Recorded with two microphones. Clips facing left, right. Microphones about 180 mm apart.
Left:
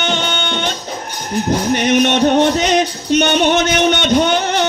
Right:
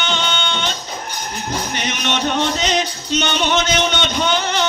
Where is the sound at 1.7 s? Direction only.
55° left (ahead or behind).